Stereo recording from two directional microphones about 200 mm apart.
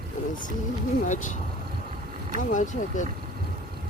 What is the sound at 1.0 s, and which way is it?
Speech, 40° left (ahead or behind).